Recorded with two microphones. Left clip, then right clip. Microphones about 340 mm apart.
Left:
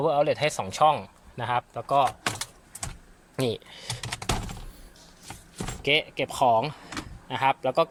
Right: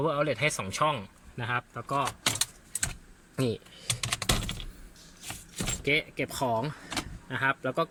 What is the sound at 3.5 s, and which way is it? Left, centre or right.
Speech, centre.